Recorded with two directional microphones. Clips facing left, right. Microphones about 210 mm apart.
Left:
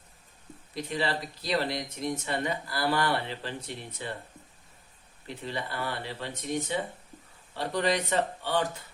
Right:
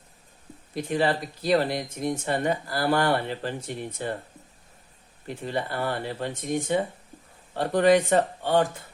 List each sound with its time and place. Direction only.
0.7 s speech: 50° right (ahead or behind)
5.3 s speech: 45° right (ahead or behind)